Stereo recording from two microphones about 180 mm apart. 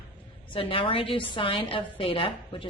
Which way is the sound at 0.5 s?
30° left (ahead or behind).